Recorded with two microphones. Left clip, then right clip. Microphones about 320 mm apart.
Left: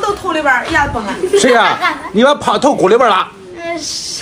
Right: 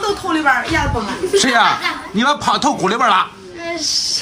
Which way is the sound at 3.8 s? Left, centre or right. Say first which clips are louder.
Right 4 dB; centre.